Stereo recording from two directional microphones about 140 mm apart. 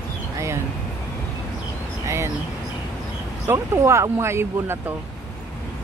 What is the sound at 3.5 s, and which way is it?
Speech, 20° right (ahead or behind).